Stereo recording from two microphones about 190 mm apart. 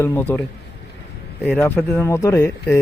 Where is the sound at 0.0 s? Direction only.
10° left (ahead or behind).